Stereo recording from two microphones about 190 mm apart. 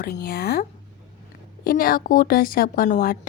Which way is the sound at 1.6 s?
50° left (ahead or behind).